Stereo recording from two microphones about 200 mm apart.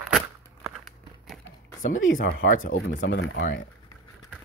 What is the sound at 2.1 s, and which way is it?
Speech, 40° left (ahead or behind).